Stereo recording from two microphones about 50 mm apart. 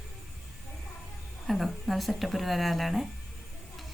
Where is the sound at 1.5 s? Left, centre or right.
Centre.